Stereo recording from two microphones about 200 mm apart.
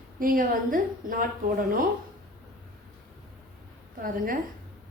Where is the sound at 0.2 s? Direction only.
45° right (ahead or behind).